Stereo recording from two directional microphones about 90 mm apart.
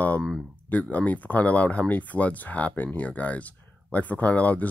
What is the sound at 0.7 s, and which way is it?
Speech, 15° left (ahead or behind).